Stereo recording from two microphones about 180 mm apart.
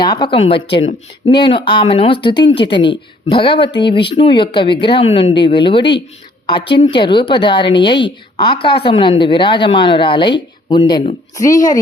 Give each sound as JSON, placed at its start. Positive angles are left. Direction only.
{"t": 0.0, "sound": "a woman's voice", "side_deg": 25}